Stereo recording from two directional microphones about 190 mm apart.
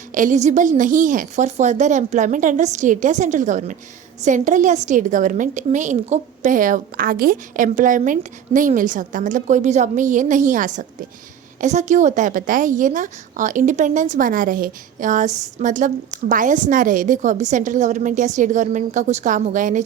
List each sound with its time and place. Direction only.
0.1 s a woman's voice: 40° right (ahead or behind)